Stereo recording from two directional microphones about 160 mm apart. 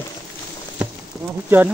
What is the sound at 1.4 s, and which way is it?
Speech, 10° right (ahead or behind).